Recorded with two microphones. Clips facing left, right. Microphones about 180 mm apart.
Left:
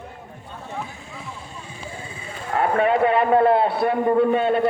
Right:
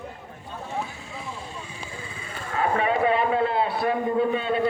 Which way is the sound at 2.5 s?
60° left (ahead or behind).